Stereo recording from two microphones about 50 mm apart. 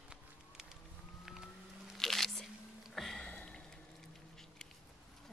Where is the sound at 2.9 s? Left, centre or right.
Centre.